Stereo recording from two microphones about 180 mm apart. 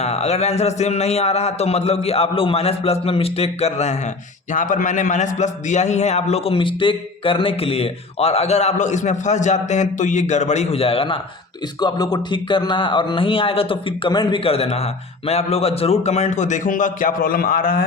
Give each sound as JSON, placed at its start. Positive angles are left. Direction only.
{"t": 0.0, "sound": "a man's voice", "side_deg": 35}